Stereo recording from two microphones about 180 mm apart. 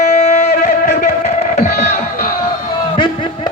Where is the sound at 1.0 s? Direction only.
40° left (ahead or behind).